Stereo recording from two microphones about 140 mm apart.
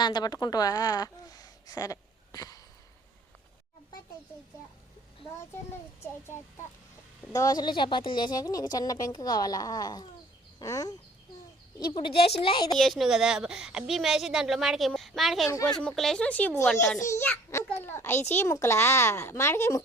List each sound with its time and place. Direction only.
0.0 s a woman's voice: 30° left (ahead or behind)
7.3 s speech: 25° left (ahead or behind)
12.7 s a woman's voice: centre (ahead or behind); by 19.8 s 20° left (ahead or behind)